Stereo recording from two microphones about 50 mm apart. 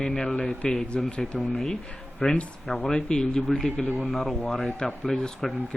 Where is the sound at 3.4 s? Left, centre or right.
Centre.